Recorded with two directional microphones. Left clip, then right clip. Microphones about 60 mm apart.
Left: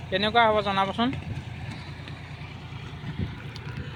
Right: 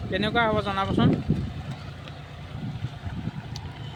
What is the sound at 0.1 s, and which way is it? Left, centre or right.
Speech, right.